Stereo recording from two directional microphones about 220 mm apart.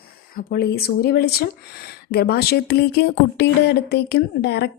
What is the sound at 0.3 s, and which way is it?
Speech, 45° left (ahead or behind).